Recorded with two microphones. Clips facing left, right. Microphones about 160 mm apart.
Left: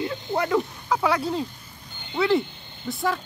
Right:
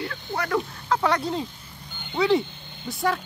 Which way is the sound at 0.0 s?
20° left (ahead or behind).